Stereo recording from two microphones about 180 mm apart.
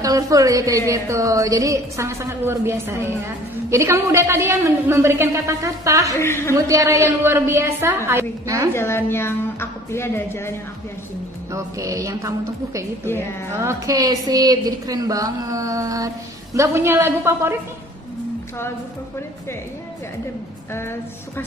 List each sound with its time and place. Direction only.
0.0 s a woman's voice: 20° right (ahead or behind)
6.1 s a woman's voice: 15° left (ahead or behind)
6.5 s a woman's voice: 20° right (ahead or behind)
8.7 s a woman's voice: 15° left (ahead or behind)
11.5 s a woman's voice: 20° right (ahead or behind)